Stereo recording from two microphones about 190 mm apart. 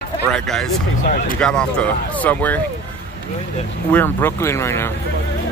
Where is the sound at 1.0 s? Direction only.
50° left (ahead or behind).